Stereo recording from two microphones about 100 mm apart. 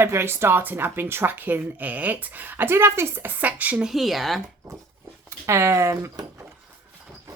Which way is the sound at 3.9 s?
Centre (ahead or behind).